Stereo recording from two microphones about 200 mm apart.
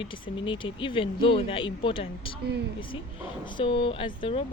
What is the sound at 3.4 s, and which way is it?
Speech, 25° left (ahead or behind).